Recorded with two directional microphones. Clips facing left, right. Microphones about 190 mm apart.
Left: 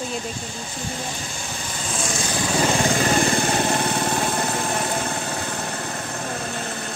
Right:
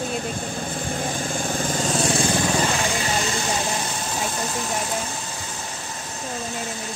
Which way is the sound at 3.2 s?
55° left (ahead or behind).